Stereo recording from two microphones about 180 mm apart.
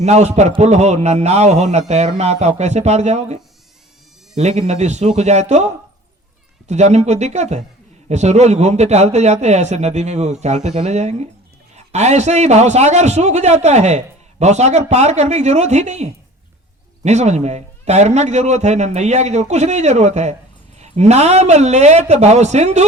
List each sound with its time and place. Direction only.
0.0 s a man's voice: 40° right (ahead or behind)